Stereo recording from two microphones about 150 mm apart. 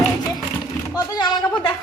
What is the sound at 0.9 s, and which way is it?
Speech, 25° left (ahead or behind).